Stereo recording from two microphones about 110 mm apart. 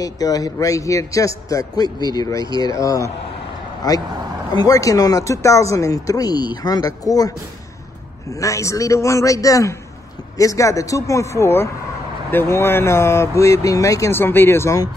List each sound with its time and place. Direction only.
0.0 s a man's voice: 35° left (ahead or behind)